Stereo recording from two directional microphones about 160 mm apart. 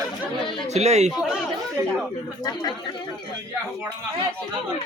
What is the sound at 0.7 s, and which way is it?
Speech, 45° right (ahead or behind).